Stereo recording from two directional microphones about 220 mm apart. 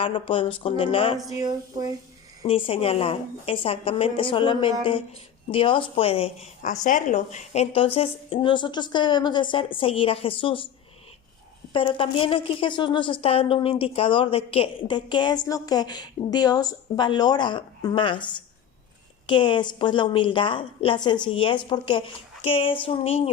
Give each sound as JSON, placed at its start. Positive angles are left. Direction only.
{"t": 0.0, "sound": "a woman's voice", "side_deg": 25}
{"t": 1.3, "sound": "speech", "side_deg": -15}
{"t": 2.4, "sound": "a woman's voice", "side_deg": 25}
{"t": 11.7, "sound": "a woman's voice", "side_deg": 25}